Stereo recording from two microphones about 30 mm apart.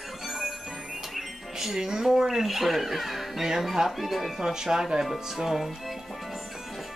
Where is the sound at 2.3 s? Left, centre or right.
Centre.